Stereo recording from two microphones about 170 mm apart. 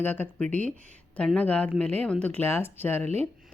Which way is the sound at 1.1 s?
5° left (ahead or behind).